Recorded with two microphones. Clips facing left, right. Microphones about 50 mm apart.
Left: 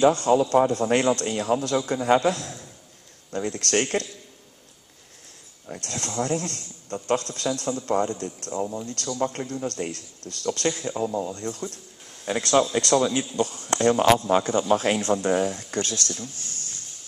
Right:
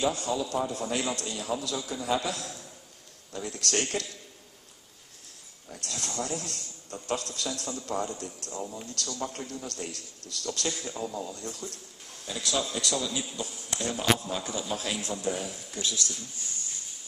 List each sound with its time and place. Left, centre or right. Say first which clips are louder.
0.0 s a man's voice: left 10 dB; left
5.7 s speech: left 5 dB; left
8.5 s speech: left 9 dB; left
8.8 s a man's voice: left 8 dB; left
12.3 s a man's voice: left 10 dB; left
16.2 s a sound: left 5 dB; left